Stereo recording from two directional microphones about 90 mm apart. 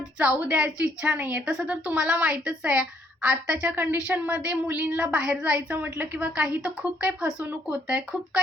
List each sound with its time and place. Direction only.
0.2 s a woman's voice: 15° right (ahead or behind)